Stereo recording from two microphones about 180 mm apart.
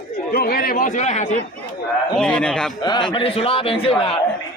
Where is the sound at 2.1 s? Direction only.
5° left (ahead or behind).